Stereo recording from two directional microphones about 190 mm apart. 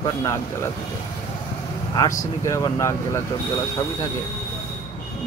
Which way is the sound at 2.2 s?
15° left (ahead or behind).